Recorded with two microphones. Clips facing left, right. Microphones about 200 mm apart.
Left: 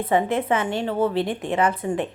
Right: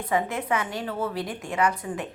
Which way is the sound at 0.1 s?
30° left (ahead or behind).